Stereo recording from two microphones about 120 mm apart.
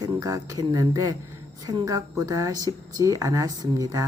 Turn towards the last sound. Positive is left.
turn(degrees=-30)  # may be behind; listen again after turning